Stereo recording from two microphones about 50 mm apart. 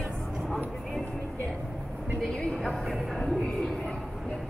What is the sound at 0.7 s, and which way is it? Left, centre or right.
Vehicle, centre.